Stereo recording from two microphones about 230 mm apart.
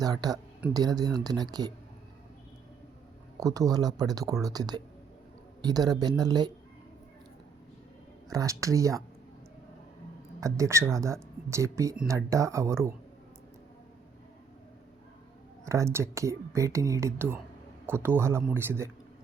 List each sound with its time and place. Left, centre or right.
0.0 s speech: centre
3.4 s speech: centre
8.3 s speech: centre
10.4 s speech: centre
15.6 s speech: centre